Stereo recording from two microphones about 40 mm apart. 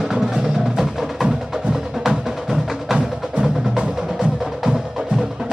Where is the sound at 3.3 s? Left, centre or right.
Right.